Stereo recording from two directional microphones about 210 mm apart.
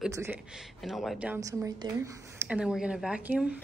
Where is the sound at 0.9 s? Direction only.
Centre (ahead or behind).